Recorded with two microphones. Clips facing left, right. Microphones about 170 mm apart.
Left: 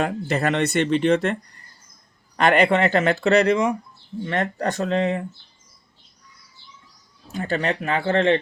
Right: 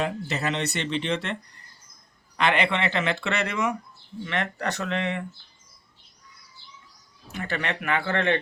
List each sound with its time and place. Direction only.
0.0 s speech: 55° left (ahead or behind); by 5.2 s 35° left (ahead or behind)
7.3 s speech: 35° left (ahead or behind)